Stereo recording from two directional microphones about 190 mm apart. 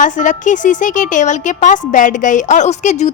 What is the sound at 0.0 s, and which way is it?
A woman's voice, 40° left (ahead or behind).